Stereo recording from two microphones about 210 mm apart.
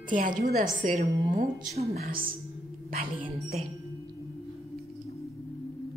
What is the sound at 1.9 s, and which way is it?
Speech, 45° right (ahead or behind).